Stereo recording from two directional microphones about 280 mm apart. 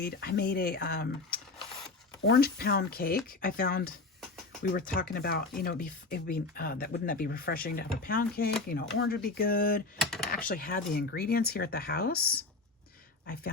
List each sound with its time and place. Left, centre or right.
0.0 s speech: left
10.0 s computer keyboard: centre
10.5 s speech: left